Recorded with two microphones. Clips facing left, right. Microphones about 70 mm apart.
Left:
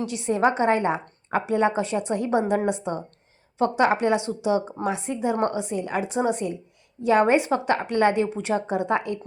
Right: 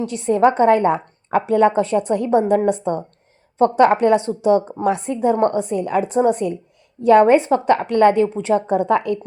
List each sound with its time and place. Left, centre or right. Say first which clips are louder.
0.0 s a woman's voice: right 6 dB; right